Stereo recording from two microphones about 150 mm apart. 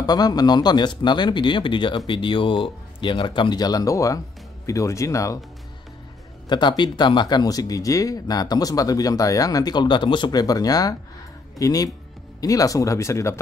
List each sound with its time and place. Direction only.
0.0 s speech: 25° left (ahead or behind)
6.8 s speech: 30° left (ahead or behind)